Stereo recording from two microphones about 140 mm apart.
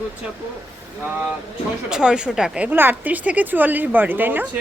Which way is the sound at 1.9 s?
5° right (ahead or behind).